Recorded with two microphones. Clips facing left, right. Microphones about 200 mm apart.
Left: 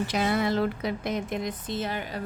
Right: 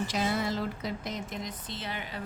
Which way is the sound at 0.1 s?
60° left (ahead or behind).